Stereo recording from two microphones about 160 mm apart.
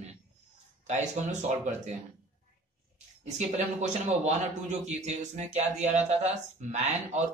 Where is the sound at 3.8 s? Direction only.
50° right (ahead or behind).